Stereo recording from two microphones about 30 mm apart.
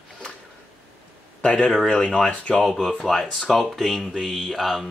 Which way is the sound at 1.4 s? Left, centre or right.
Left.